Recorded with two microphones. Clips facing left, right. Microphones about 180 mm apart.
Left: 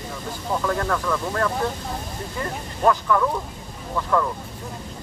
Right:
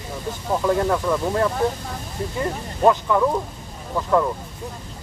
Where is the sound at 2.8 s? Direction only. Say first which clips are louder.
Right 2 dB; 20° right (ahead or behind).